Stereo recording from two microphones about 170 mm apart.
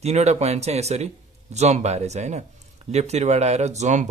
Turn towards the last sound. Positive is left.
turn(degrees=-45)  # may be behind; listen again after turning